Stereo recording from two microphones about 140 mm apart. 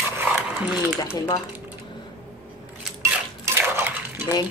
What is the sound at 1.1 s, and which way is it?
Speech, 25° left (ahead or behind).